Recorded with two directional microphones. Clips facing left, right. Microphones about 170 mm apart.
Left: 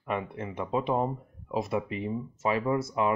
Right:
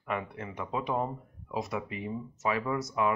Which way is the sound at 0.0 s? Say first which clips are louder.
Left 3 dB; 25° left (ahead or behind).